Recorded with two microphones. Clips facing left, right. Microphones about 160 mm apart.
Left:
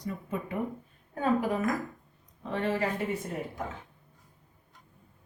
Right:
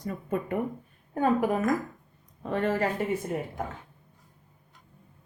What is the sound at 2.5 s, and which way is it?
Speech, 45° right (ahead or behind).